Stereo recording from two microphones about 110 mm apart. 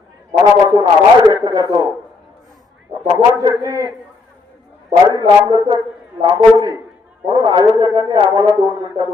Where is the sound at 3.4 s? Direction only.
35° right (ahead or behind).